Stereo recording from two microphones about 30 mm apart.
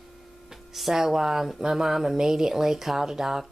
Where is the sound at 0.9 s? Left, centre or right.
Centre.